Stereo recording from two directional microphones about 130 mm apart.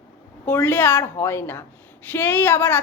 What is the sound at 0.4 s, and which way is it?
A woman's voice, 15° left (ahead or behind).